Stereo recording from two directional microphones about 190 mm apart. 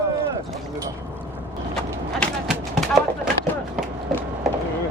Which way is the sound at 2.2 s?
Centre (ahead or behind).